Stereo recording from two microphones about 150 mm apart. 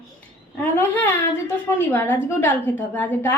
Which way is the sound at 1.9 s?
15° left (ahead or behind).